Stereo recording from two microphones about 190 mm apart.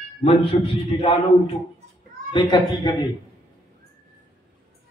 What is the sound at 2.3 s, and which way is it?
Speech, 25° left (ahead or behind).